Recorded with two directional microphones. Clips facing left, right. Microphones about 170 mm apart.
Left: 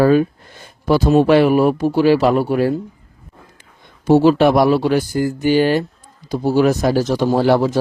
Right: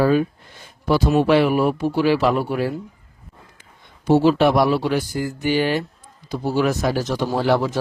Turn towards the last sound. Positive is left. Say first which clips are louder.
# left 5 dB
turn(degrees=40)  # may be behind; listen again after turning